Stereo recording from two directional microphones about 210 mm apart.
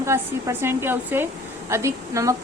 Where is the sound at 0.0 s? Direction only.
15° right (ahead or behind).